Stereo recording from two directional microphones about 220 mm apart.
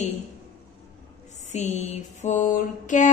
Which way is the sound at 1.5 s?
30° left (ahead or behind).